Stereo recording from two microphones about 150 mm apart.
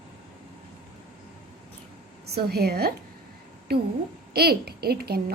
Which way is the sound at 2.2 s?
90° right.